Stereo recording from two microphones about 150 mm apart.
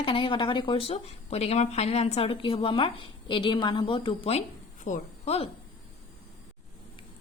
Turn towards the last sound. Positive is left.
turn(degrees=45)  # may be behind; listen again after turning